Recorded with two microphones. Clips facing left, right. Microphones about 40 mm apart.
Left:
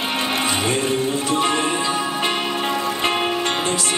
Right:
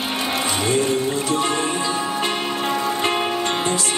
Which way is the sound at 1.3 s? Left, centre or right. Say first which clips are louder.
Left 1 dB; centre.